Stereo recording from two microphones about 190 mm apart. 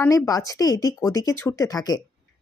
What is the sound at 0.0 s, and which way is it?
Speech, 15° left (ahead or behind).